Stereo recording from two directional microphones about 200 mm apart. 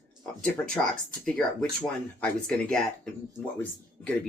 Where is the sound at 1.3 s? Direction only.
5° left (ahead or behind).